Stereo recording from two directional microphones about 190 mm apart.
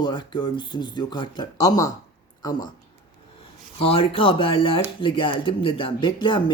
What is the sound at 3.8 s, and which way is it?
Speech, 30° left (ahead or behind).